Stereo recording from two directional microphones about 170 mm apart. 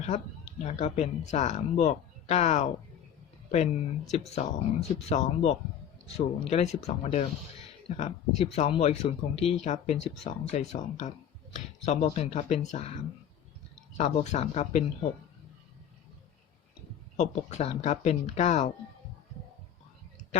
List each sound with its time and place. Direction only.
0.6 s speech: 40° left (ahead or behind)
17.2 s speech: 40° left (ahead or behind)